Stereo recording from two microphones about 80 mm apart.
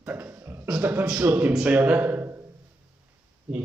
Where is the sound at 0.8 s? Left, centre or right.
Right.